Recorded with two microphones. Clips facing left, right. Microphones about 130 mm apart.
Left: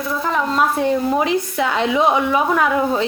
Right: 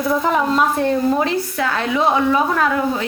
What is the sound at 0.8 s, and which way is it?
A woman's voice, 10° left (ahead or behind).